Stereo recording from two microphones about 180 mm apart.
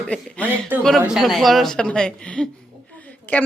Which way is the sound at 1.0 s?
5° right (ahead or behind).